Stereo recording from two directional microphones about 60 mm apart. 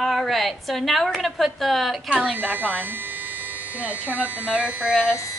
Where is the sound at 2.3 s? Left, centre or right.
Right.